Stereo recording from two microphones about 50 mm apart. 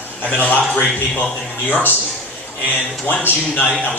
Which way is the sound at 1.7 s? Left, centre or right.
Left.